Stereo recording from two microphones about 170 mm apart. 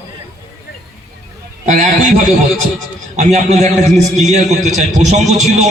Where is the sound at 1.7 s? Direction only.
50° right (ahead or behind).